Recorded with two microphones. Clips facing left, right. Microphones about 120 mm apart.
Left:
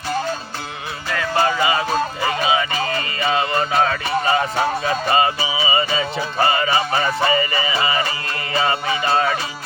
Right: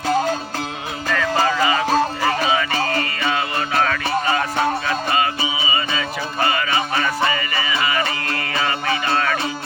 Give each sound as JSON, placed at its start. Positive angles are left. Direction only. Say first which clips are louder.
{"t": 1.1, "sound": "music", "louder": "even", "side_deg": 10}